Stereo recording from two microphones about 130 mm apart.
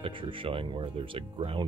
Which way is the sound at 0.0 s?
40° right (ahead or behind).